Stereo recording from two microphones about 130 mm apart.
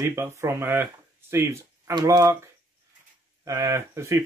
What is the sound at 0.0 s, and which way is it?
Speech, 20° right (ahead or behind).